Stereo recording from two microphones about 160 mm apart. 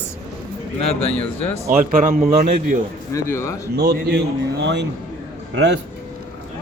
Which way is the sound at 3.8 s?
85° right.